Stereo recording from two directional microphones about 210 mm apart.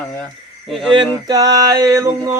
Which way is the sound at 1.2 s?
20° right (ahead or behind).